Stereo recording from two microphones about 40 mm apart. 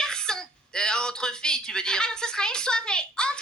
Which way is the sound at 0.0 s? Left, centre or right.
Centre.